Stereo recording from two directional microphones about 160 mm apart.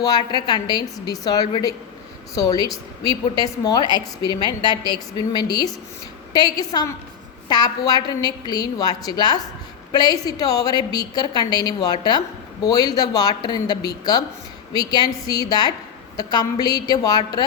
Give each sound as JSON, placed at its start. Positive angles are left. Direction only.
{"t": 0.0, "sound": "a woman's voice", "side_deg": 25}